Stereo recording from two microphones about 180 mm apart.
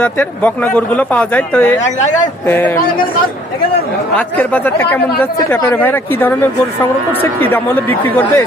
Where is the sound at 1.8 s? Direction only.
40° left (ahead or behind).